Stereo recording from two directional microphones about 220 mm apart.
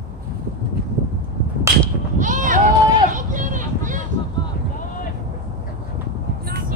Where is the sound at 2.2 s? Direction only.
35° right (ahead or behind).